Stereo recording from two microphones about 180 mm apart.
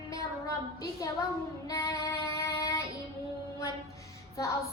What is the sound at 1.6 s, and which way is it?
Child singing, 20° left (ahead or behind).